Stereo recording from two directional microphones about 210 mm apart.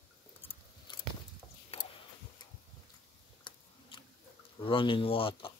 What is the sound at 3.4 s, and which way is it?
Chewing, 25° left (ahead or behind).